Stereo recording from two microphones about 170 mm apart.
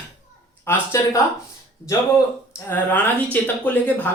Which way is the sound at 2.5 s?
15° left (ahead or behind).